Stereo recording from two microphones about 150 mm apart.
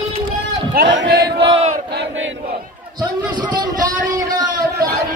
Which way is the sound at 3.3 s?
30° right (ahead or behind).